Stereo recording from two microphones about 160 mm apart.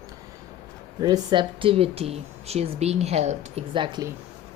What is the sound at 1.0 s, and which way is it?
Speech, 25° right (ahead or behind).